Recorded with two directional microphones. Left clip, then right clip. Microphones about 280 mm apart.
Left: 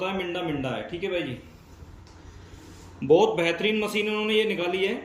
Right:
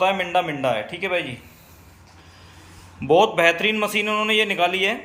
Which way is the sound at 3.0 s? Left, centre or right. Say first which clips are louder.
Right 4 dB; centre.